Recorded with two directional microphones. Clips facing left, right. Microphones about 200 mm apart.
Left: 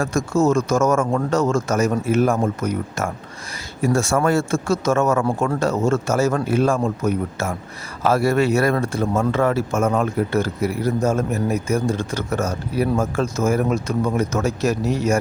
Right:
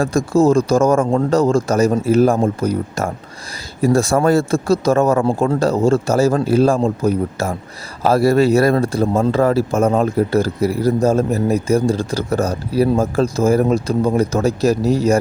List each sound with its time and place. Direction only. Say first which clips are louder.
0.0 s a man's voice: right 4 dB; 35° right (ahead or behind)